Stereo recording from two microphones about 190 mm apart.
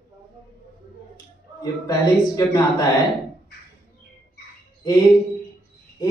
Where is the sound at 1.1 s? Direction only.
20° left (ahead or behind).